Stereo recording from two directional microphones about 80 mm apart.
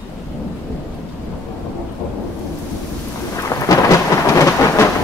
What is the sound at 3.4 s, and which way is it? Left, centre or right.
Thunder, left.